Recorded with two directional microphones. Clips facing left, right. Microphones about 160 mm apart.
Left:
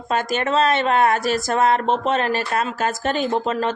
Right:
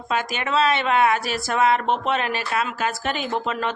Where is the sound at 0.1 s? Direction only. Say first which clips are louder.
Left 3 dB; 45° left (ahead or behind).